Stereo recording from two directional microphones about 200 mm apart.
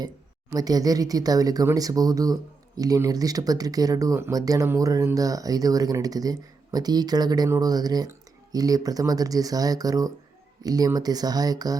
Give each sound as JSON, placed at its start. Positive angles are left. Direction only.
{"t": 0.5, "sound": "speech", "side_deg": -20}